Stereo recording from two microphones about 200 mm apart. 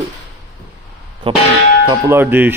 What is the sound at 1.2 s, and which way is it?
Speech, 25° right (ahead or behind).